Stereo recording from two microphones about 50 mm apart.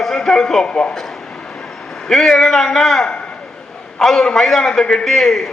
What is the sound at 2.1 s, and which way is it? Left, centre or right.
A man's voice, centre.